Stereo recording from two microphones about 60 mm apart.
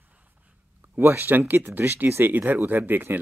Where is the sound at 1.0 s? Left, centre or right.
Right.